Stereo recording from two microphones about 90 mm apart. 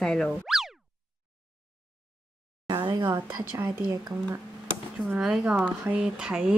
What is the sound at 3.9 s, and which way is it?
Speech, 45° right (ahead or behind).